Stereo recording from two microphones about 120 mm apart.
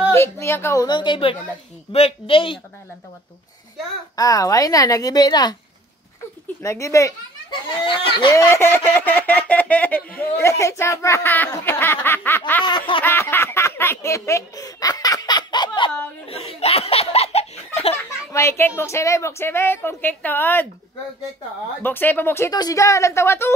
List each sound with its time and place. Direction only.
0.1 s a woman's voice: 20° left (ahead or behind)
0.8 s a woman's voice: 40° left (ahead or behind)
1.9 s speech: 55° left (ahead or behind)
4.2 s a woman's voice: 30° left (ahead or behind)
6.6 s a sound: 25° left (ahead or behind)
7.8 s speech: 45° left (ahead or behind)
8.4 s speech: 20° left (ahead or behind)
12.6 s speech: 45° left (ahead or behind)
13.0 s a sound: 20° left (ahead or behind); by 15.9 s 40° left (ahead or behind)
16.3 s speech: 60° left (ahead or behind)
17.9 s a sound: 25° left (ahead or behind)
21.8 s speech: 15° left (ahead or behind)
22.5 s a sound: 30° left (ahead or behind)